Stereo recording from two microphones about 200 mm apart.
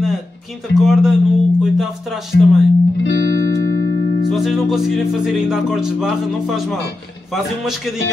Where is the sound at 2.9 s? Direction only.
65° left (ahead or behind).